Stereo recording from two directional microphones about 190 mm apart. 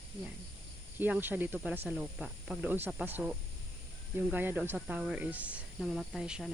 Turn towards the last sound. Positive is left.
turn(degrees=-5)  # may be behind; listen again after turning